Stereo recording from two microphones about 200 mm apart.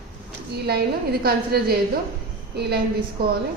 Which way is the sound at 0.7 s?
50° right (ahead or behind).